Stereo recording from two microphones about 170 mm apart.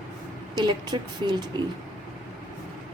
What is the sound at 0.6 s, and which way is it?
Speech, 25° right (ahead or behind).